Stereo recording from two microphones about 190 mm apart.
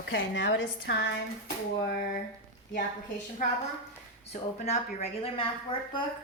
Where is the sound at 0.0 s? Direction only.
70° left (ahead or behind).